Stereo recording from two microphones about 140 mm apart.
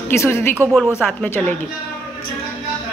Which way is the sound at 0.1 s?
20° left (ahead or behind).